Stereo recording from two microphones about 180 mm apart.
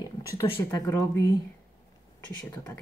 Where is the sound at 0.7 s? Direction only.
20° left (ahead or behind).